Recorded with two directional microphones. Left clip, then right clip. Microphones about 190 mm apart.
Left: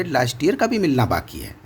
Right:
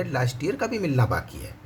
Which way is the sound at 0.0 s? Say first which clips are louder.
Left 8 dB; 45° left (ahead or behind).